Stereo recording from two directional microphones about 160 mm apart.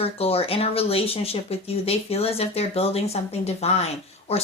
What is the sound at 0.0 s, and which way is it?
A woman's voice, 40° left (ahead or behind).